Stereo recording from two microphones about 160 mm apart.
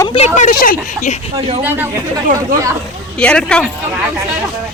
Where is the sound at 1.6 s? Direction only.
10° right (ahead or behind).